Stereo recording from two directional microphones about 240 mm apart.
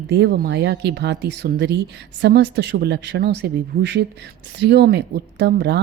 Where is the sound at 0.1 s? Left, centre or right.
Right.